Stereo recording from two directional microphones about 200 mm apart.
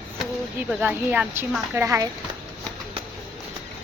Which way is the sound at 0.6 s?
10° right (ahead or behind).